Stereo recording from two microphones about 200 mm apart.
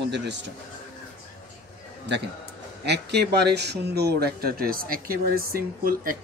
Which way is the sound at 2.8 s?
55° right (ahead or behind).